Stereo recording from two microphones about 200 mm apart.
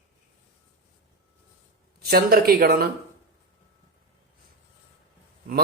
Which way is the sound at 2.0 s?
50° right (ahead or behind).